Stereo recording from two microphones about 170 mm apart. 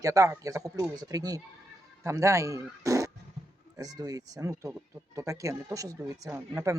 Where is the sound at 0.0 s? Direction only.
20° right (ahead or behind).